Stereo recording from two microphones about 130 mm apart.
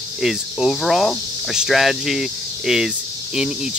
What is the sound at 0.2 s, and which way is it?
Speech, centre (ahead or behind).